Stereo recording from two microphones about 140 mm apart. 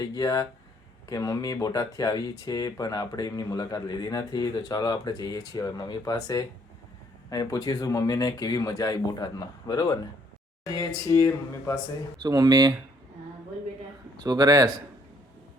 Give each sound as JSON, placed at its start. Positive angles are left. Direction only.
{"t": 0.0, "sound": "speech", "side_deg": 25}
{"t": 12.2, "sound": "speech", "side_deg": -30}
{"t": 14.2, "sound": "speech", "side_deg": -30}